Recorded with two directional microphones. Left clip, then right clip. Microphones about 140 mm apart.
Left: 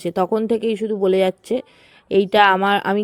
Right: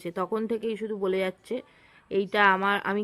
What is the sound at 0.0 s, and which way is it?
Speech, 40° left (ahead or behind).